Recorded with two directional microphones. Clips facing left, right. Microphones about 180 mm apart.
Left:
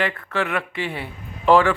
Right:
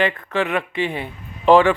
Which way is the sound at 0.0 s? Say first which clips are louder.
Right 3 dB; 20° right (ahead or behind).